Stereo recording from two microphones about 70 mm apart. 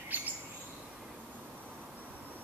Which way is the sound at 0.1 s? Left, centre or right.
Right.